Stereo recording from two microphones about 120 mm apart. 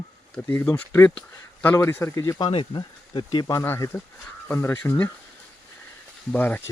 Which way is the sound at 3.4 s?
20° left (ahead or behind).